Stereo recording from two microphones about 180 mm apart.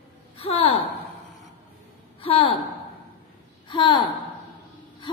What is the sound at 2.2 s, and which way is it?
Speech, 30° left (ahead or behind).